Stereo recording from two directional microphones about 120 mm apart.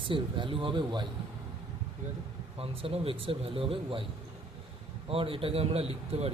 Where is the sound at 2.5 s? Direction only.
50° right (ahead or behind).